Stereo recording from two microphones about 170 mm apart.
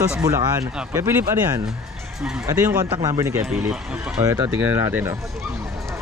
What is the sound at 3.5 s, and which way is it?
Speech, 5° right (ahead or behind).